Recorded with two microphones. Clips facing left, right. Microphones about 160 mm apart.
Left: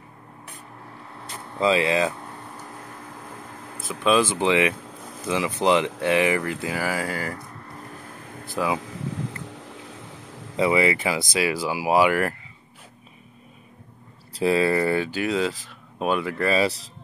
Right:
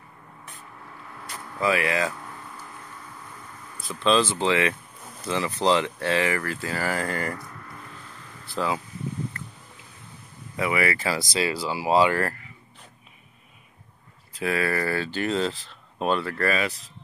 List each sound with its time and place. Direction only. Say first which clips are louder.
1.1 s a sound: left 2 dB; 25° left (ahead or behind); by 3.9 s 50° left (ahead or behind)
4.0 s speech: left 1 dB; 10° left (ahead or behind)
4.7 s a sound: left 6 dB; 90° left
5.3 s speech: left 2 dB; 15° left (ahead or behind)
7.3 s a sound: left 1 dB; 30° left (ahead or behind)
8.0 s air conditioning: left 6 dB; 55° left (ahead or behind)
8.7 s a sound: left 2 dB; 90° left
9.4 s boat: left 7 dB; 90° left
10.5 s speech: left 5 dB; 25° left (ahead or behind)
14.3 s speech: left 6 dB; 25° left (ahead or behind)
15.1 s speech: left 1 dB; 10° left (ahead or behind)
16.4 s speech: left 5 dB; 30° left (ahead or behind)